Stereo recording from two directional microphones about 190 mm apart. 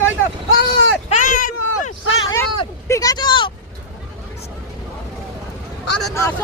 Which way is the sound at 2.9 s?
20° left (ahead or behind).